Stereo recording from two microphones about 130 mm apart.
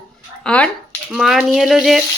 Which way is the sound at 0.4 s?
10° left (ahead or behind).